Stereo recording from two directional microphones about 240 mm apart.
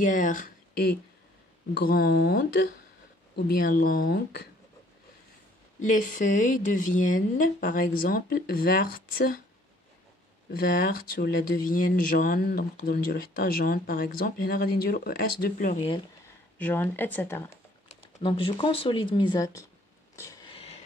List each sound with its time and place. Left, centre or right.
0.0 s speech: left
1.7 s speech: left
6.1 s speech: left
10.5 s speech: left
16.5 s speech: centre
17.8 s speech: left
20.2 s cat: centre